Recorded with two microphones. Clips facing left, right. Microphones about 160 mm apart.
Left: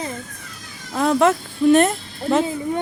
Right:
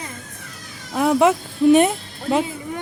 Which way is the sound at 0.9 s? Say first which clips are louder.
Right 1 dB; 15° right (ahead or behind).